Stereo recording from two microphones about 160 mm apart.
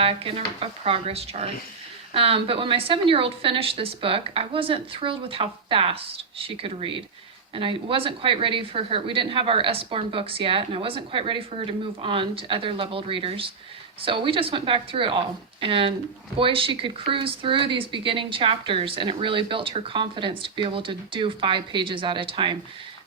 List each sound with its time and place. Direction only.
0.0 s a woman's voice: 35° right (ahead or behind)